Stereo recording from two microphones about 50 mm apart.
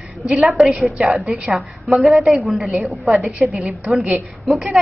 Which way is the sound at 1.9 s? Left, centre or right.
Centre.